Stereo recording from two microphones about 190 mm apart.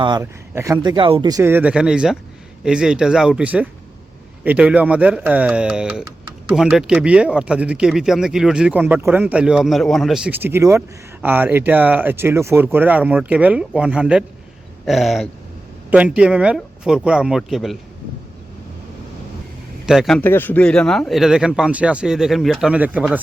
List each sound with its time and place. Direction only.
0.0 s speech: 20° right (ahead or behind); by 17.7 s centre (ahead or behind)
19.8 s speech: centre (ahead or behind)